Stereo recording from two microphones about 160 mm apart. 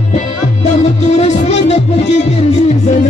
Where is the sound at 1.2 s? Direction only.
40° left (ahead or behind).